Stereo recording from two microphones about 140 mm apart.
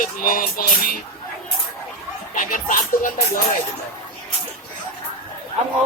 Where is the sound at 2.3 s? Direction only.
80° left.